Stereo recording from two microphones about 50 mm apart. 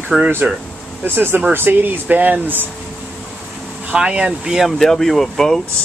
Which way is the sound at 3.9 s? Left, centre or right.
Centre.